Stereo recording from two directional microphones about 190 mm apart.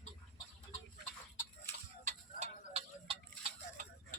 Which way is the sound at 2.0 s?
35° right (ahead or behind).